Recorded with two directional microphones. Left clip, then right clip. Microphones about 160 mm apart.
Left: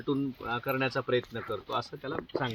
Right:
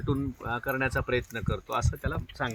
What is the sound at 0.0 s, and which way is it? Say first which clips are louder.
Speech: even; 25° right (ahead or behind).